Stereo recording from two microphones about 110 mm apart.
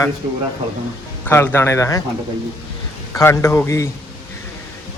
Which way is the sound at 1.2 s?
20° left (ahead or behind).